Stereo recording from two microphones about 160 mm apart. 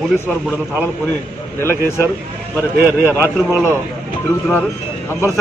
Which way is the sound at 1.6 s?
15° left (ahead or behind).